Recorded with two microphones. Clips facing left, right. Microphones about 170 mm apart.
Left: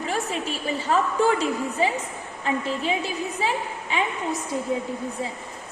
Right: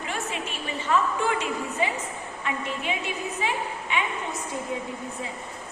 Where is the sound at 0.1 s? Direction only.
35° left (ahead or behind).